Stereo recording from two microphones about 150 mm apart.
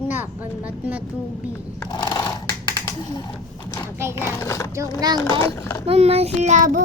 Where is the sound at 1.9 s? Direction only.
25° left (ahead or behind).